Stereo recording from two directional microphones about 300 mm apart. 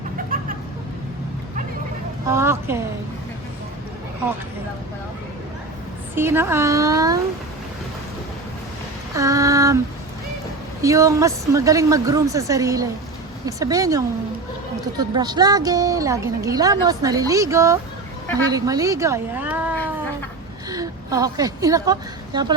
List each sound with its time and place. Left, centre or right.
0.3 s vehicle: right
2.2 s a woman's voice: centre
6.1 s a woman's voice: centre
9.1 s a woman's voice: centre
10.8 s a woman's voice: centre